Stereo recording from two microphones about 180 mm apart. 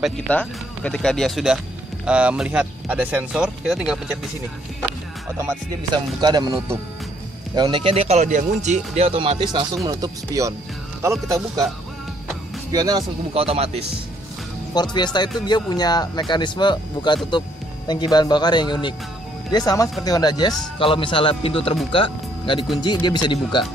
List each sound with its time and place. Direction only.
0.0 s speech: 5° left (ahead or behind)
6.2 s speech: 25° right (ahead or behind)
12.7 s speech: 20° right (ahead or behind)
13.3 s speech: 35° right (ahead or behind)
14.7 s speech: 25° left (ahead or behind)